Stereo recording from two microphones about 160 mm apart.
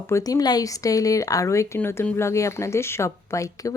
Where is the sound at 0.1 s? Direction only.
25° left (ahead or behind).